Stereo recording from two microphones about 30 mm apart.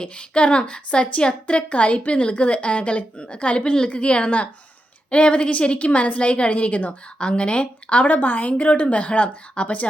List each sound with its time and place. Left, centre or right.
0.0 s a woman's voice: left
6.5 s a woman's voice: left
7.2 s a woman's voice: left
8.0 s a woman's voice: left
8.5 s a woman's voice: left